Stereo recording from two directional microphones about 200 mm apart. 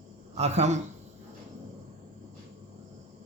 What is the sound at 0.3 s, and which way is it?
Speech, 35° right (ahead or behind).